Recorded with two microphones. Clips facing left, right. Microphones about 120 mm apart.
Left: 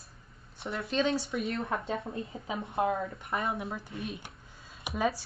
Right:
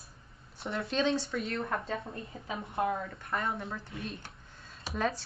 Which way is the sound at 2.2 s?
20° left (ahead or behind).